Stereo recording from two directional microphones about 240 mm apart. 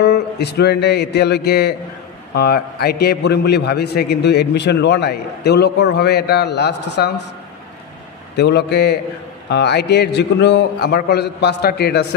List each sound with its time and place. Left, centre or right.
0.0 s a man's voice: left
8.4 s a man's voice: left